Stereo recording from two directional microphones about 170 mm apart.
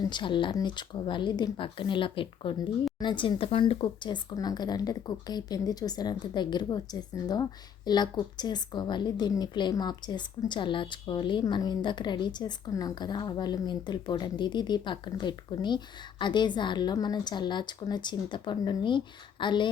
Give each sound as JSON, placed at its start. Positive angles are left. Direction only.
{"t": 0.0, "sound": "a woman's voice", "side_deg": 25}